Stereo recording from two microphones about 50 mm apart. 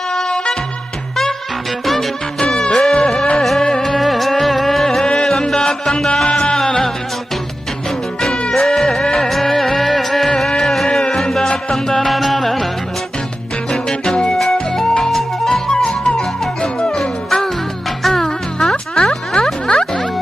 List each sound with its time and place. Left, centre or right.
0.1 s music: centre
2.4 s music: centre
8.2 s music: centre
13.7 s music: centre